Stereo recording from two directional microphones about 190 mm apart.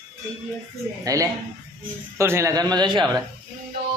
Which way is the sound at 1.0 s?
15° right (ahead or behind).